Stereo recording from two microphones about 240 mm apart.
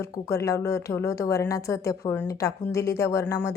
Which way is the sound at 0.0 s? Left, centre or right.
Centre.